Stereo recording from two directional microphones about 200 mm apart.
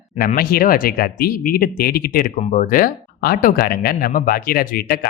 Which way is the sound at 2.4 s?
35° left (ahead or behind).